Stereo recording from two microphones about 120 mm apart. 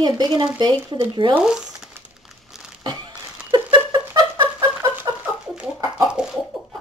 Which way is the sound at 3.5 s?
40° right (ahead or behind).